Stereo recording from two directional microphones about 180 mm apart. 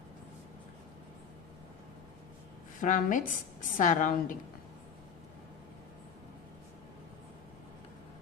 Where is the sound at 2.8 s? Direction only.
45° left (ahead or behind).